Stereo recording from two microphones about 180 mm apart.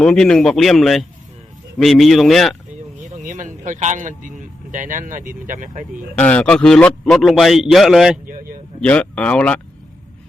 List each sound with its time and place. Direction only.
0.0 s a man's voice: 5° left (ahead or behind)
3.2 s a sound: 45° right (ahead or behind)
4.7 s speech: 45° right (ahead or behind)
6.1 s a man's voice: 10° left (ahead or behind)